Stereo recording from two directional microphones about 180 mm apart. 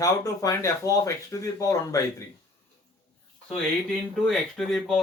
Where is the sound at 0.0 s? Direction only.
20° left (ahead or behind).